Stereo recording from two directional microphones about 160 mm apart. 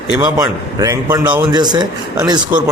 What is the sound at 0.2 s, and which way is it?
Speech, 20° right (ahead or behind).